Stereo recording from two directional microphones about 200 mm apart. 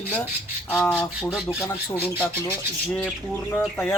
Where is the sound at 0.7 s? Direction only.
5° left (ahead or behind).